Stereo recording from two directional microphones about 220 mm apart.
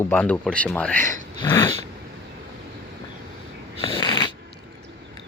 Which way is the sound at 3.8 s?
25° left (ahead or behind).